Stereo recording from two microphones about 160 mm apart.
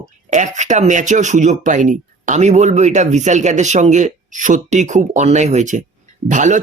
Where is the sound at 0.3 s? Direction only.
50° right (ahead or behind).